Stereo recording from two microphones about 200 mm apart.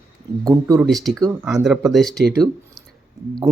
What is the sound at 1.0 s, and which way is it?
Speech, centre (ahead or behind).